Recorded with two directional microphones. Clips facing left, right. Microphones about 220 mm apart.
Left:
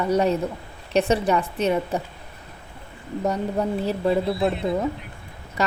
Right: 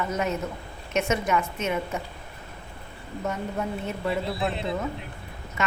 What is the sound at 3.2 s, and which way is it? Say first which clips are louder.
A woman's voice: left 6 dB; 35° left (ahead or behind).